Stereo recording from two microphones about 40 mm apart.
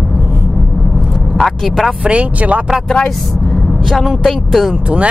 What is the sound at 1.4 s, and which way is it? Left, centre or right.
Speech, centre.